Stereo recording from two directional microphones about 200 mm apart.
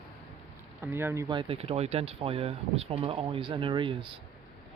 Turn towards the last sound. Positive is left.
turn(degrees=-25)  # may be behind; listen again after turning